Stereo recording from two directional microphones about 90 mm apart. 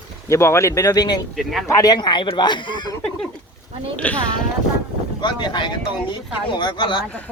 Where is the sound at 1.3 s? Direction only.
Centre (ahead or behind).